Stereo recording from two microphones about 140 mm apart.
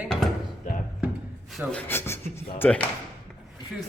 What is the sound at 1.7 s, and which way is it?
Speech, 15° left (ahead or behind).